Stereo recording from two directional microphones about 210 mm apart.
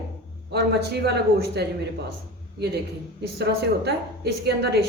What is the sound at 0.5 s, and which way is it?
A man's voice, 50° right (ahead or behind).